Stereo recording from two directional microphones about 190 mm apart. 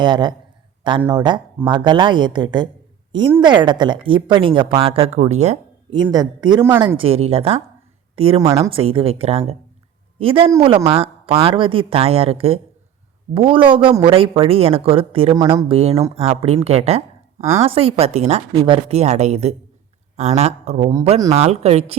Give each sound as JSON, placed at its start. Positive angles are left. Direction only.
{"t": 0.0, "sound": "speech", "side_deg": -25}
{"t": 6.0, "sound": "speech", "side_deg": -20}
{"t": 6.6, "sound": "speech", "side_deg": -10}
{"t": 6.8, "sound": "speech", "side_deg": -30}
{"t": 8.4, "sound": "speech", "side_deg": -15}
{"t": 8.7, "sound": "speech", "side_deg": -30}